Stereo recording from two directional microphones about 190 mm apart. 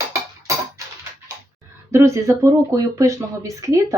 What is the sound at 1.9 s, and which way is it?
Speech, 15° right (ahead or behind).